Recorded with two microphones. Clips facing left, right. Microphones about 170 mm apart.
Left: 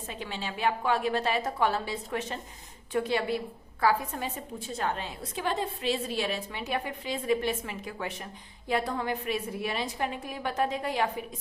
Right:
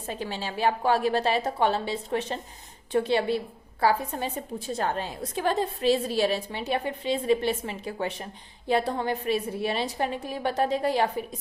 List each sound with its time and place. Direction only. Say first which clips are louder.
0.1 s a woman's voice: right 5 dB; 35° right (ahead or behind)